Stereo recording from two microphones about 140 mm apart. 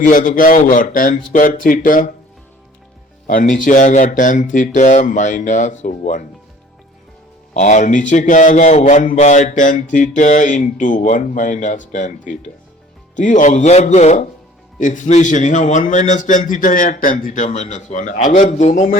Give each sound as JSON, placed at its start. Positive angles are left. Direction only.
{"t": 0.0, "sound": "a man's voice", "side_deg": 70}
{"t": 3.2, "sound": "a man's voice", "side_deg": 70}
{"t": 7.5, "sound": "a man's voice", "side_deg": 60}